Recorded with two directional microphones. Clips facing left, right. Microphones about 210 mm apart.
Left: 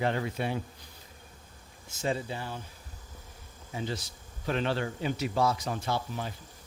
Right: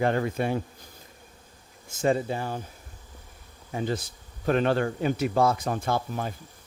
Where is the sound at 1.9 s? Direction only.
50° right (ahead or behind).